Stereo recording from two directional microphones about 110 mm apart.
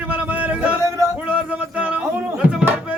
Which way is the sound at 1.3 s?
15° right (ahead or behind).